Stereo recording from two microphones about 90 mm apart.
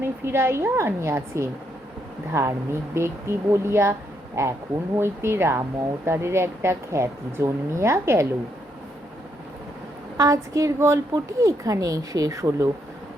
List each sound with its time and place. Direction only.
0.0 s a woman's voice: 25° right (ahead or behind)
10.2 s a woman's voice: 40° right (ahead or behind)